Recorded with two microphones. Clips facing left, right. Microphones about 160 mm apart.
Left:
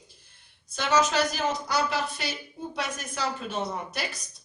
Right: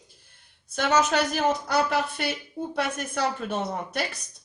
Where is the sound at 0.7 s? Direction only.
55° right (ahead or behind).